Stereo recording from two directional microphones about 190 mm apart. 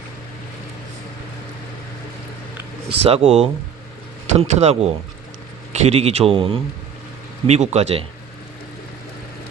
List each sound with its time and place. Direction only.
3.0 s speech: 35° right (ahead or behind)